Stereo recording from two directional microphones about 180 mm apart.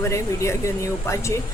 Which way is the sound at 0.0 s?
15° left (ahead or behind).